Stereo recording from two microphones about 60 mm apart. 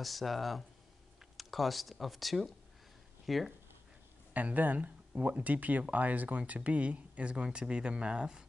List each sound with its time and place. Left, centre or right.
0.0 s speech: centre
4.3 s speech: right